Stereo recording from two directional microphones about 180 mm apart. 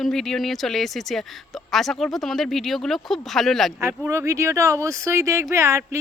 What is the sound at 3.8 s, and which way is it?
Speech, 15° right (ahead or behind).